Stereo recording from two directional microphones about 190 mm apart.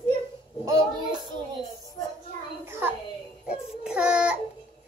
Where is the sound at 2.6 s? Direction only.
10° right (ahead or behind).